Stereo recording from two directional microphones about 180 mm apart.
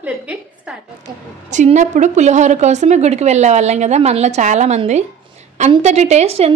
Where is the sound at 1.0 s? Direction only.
40° right (ahead or behind).